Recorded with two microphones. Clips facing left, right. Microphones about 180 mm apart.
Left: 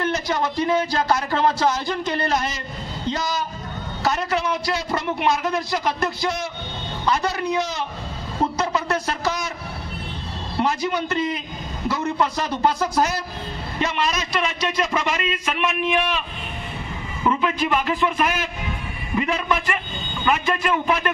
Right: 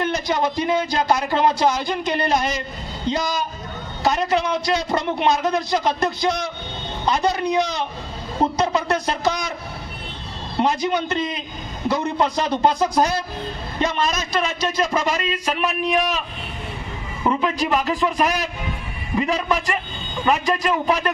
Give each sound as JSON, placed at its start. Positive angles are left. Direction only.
{"t": 0.0, "sound": "a man's voice", "side_deg": -15}
{"t": 10.6, "sound": "a man's voice", "side_deg": -20}
{"t": 13.7, "sound": "a man's voice", "side_deg": -45}